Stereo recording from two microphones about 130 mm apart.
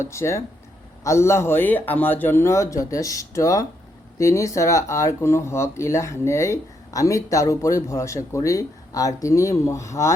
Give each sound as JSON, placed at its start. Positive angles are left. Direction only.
{"t": 0.0, "sound": "speech", "side_deg": 20}